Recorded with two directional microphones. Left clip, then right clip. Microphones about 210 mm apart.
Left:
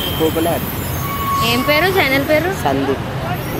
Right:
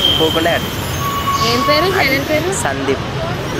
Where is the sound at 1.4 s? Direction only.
45° left (ahead or behind).